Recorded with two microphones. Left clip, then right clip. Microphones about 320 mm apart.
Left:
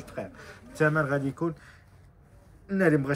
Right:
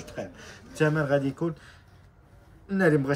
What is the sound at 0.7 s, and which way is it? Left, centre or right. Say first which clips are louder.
Speech: right 1 dB; centre.